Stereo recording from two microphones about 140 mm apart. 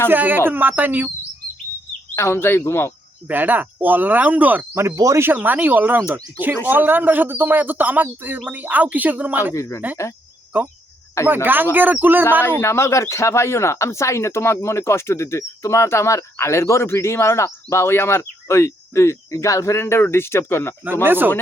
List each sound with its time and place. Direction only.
0.1 s a man's voice: 15° right (ahead or behind)
2.1 s speech: 20° left (ahead or behind)
3.2 s a man's voice: 15° right (ahead or behind)
9.6 s speech: 20° left (ahead or behind)
11.4 s a man's voice: 15° right (ahead or behind)
12.4 s speech: 15° left (ahead or behind)
20.8 s a man's voice: 15° right (ahead or behind)